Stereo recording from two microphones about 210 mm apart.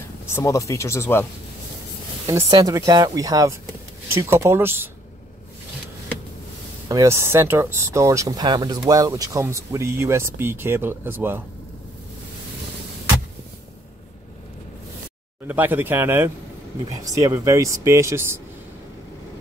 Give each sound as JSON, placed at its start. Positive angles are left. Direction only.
{"t": 0.3, "sound": "speech", "side_deg": 15}
{"t": 2.2, "sound": "speech", "side_deg": -15}
{"t": 6.9, "sound": "speech", "side_deg": -15}
{"t": 15.4, "sound": "speech", "side_deg": -10}